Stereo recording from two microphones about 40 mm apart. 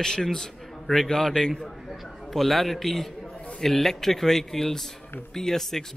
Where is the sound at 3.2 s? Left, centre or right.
Left.